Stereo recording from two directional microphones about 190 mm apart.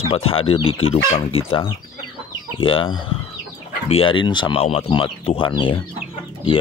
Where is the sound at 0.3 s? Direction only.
30° left (ahead or behind).